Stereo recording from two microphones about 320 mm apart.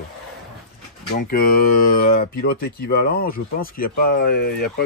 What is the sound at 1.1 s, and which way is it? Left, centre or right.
Speech, left.